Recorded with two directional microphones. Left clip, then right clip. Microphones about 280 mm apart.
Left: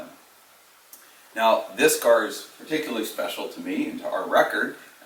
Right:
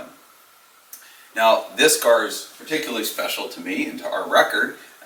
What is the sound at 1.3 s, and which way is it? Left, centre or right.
Speech, centre.